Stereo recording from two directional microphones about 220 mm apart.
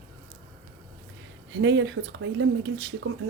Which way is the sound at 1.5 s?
55° right (ahead or behind).